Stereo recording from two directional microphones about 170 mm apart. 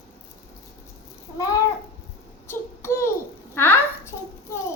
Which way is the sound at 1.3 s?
20° left (ahead or behind).